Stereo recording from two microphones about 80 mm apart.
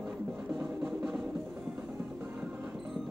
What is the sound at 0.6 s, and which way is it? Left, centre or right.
Music, centre.